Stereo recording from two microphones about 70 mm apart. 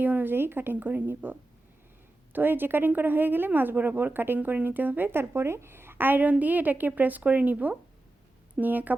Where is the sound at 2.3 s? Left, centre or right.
Right.